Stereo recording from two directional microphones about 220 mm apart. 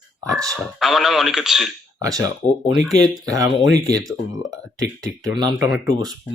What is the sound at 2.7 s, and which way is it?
Speech, centre (ahead or behind).